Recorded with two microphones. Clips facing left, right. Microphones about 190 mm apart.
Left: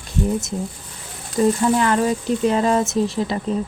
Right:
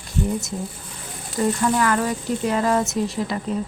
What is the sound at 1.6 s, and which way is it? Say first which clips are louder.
Speech: left 3 dB; 25° left (ahead or behind).